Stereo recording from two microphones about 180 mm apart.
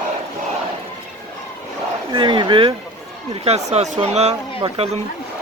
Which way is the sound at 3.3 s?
35° right (ahead or behind).